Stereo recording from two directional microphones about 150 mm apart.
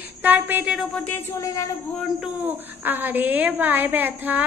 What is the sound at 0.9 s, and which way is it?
Speech, 10° left (ahead or behind).